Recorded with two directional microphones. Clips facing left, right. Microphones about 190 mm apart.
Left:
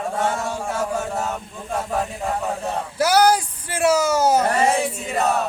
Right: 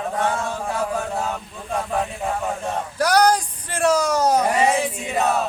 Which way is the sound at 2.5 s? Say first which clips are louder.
Even; 5° left (ahead or behind).